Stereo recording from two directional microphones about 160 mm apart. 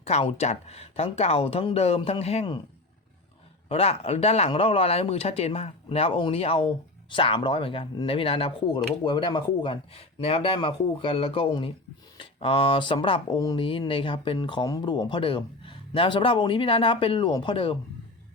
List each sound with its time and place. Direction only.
0.0 s speech: 40° left (ahead or behind)
3.7 s speech: 40° left (ahead or behind)